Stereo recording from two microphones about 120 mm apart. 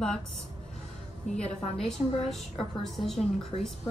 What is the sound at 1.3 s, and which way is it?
A woman's voice, 5° left (ahead or behind).